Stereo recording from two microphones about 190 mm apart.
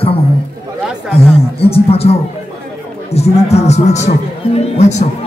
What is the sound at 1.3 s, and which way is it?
Speech, 30° left (ahead or behind).